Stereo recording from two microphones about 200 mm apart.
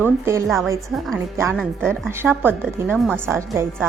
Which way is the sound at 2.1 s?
10° right (ahead or behind).